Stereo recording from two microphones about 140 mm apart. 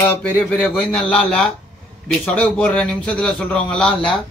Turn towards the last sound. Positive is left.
turn(degrees=5)  # may be behind; listen again after turning